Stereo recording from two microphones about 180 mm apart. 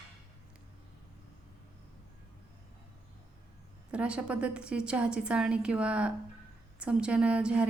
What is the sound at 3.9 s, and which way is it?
A woman's voice, 5° right (ahead or behind).